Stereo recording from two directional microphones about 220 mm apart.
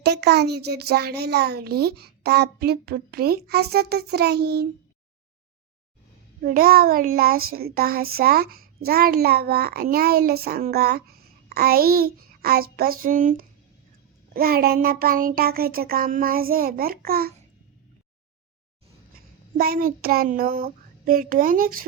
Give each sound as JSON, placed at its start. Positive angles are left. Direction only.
{"t": 0.0, "sound": "child singing", "side_deg": -50}
{"t": 6.4, "sound": "child singing", "side_deg": -40}
{"t": 19.5, "sound": "child singing", "side_deg": -40}